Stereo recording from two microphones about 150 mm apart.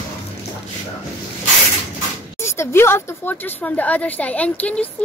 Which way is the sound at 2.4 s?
15° left (ahead or behind).